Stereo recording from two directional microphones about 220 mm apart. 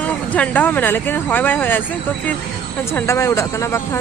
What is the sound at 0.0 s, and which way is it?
Speech, 5° left (ahead or behind).